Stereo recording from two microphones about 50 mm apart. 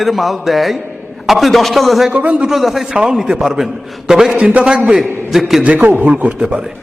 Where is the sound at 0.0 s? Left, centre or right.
Centre.